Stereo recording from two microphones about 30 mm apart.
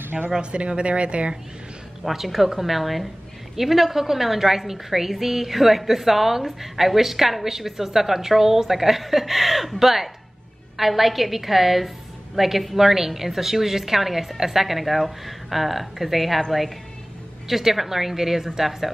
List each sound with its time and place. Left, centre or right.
0.4 s speech: right
2.0 s a woman's voice: centre
17.5 s a woman's voice: centre